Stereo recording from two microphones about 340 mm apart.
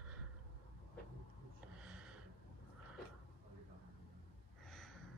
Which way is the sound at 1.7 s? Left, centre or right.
Centre.